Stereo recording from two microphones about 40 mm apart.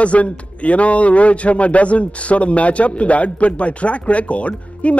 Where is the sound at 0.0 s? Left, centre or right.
Left.